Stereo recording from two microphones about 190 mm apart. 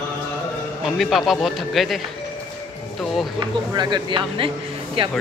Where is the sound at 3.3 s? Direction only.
20° right (ahead or behind).